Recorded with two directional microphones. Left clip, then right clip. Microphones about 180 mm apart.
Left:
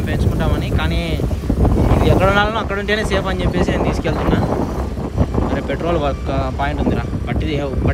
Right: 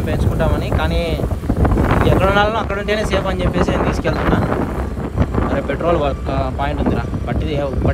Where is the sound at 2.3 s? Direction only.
30° right (ahead or behind).